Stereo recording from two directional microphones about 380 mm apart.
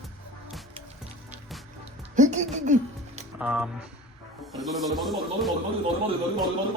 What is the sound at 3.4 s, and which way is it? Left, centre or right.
A man's voice, centre.